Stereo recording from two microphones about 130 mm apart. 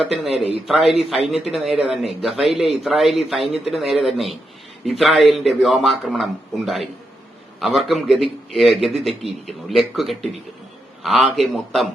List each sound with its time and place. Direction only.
0.1 s speech: 50° right (ahead or behind)
0.6 s a man's voice: centre (ahead or behind)